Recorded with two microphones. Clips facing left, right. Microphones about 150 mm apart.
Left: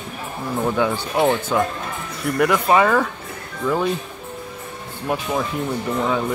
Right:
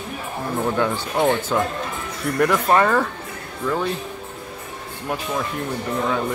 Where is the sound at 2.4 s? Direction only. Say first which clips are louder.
Left 1 dB; 5° left (ahead or behind).